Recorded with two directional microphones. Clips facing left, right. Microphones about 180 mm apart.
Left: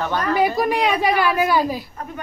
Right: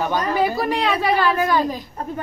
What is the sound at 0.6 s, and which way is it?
A woman's voice, 15° left (ahead or behind).